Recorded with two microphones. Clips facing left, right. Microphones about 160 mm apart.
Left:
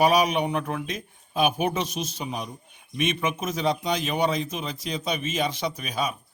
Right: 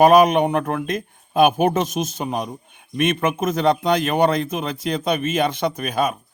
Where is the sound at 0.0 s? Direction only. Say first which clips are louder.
Right 8 dB; 50° right (ahead or behind).